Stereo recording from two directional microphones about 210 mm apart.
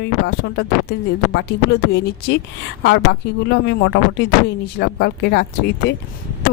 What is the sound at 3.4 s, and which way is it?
Speech, 55° left (ahead or behind).